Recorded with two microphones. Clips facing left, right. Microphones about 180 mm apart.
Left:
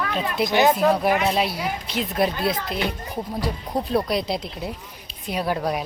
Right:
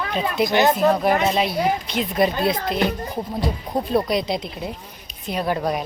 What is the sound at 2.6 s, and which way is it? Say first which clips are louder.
Speech: right 5 dB; 50° right (ahead or behind).